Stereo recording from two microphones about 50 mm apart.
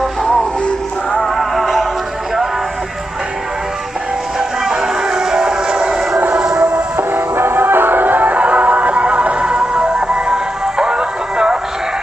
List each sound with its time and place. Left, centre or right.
1.2 s music: centre
4.4 s music: centre
6.3 s train: centre
6.9 s music: right; by 11.5 s centre